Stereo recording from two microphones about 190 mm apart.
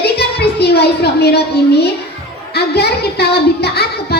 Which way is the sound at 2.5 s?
60° left (ahead or behind).